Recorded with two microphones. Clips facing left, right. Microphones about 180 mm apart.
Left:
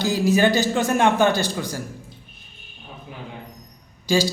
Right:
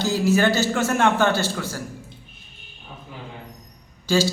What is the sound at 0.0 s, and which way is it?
A man's voice, 15° left (ahead or behind).